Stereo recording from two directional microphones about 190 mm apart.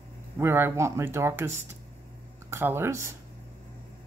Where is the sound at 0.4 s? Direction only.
10° right (ahead or behind).